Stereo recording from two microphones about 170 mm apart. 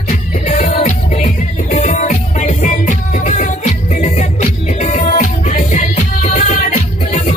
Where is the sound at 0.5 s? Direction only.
45° left (ahead or behind).